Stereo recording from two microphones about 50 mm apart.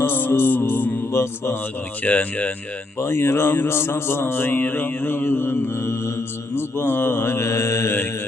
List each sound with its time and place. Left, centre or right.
0.0 s music: left
1.1 s mantra: left
2.0 s speech: left
3.0 s speech: left
3.7 s mantra: left